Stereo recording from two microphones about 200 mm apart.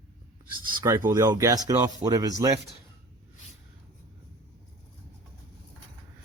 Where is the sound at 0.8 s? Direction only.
15° right (ahead or behind).